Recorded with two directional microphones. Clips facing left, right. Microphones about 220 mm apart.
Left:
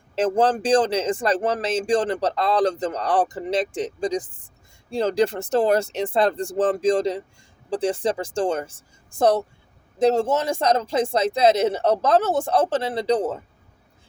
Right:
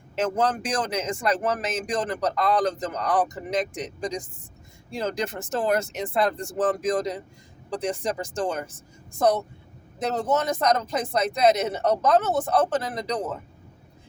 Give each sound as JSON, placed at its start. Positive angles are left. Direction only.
{"t": 0.2, "sound": "speech", "side_deg": 30}